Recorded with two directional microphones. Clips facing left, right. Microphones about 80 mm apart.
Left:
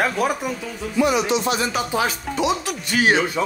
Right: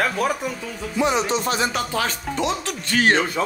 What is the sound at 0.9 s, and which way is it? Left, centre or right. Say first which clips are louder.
Speech: left 2 dB; right.